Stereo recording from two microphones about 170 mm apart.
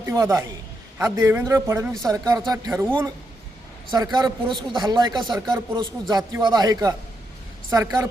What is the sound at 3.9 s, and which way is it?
Speech, 25° right (ahead or behind).